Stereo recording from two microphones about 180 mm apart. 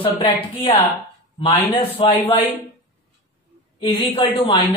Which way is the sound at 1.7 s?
30° left (ahead or behind).